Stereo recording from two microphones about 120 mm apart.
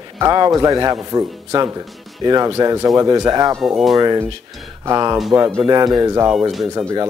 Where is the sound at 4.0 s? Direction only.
35° right (ahead or behind).